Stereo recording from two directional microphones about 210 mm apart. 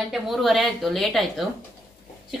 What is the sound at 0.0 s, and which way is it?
A woman's voice, centre (ahead or behind).